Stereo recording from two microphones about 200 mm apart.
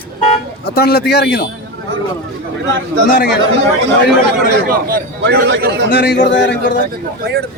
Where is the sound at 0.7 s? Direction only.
50° left (ahead or behind).